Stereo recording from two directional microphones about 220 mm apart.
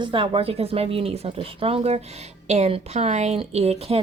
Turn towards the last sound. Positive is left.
turn(degrees=-25)  # may be behind; listen again after turning